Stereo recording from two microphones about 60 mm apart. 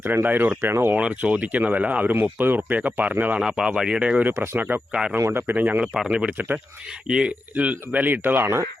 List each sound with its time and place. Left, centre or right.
0.0 s speech: right
0.9 s speech: right
3.4 s speech: centre
5.2 s speech: right
5.8 s speech: centre; by 8.6 s right